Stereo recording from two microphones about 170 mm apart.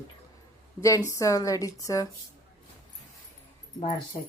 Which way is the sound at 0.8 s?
20° left (ahead or behind).